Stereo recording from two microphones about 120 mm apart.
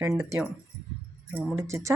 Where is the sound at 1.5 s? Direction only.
25° right (ahead or behind).